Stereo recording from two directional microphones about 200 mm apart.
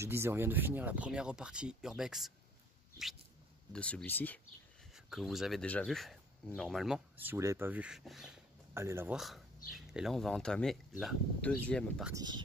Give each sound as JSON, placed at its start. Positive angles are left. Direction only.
{"t": 0.0, "sound": "speech", "side_deg": -10}
{"t": 3.7, "sound": "speech", "side_deg": 5}
{"t": 4.9, "sound": "speech", "side_deg": 0}
{"t": 8.7, "sound": "speech", "side_deg": -15}
{"t": 12.0, "sound": "speech", "side_deg": -15}